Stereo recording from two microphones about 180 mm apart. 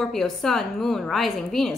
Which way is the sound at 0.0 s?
Centre (ahead or behind).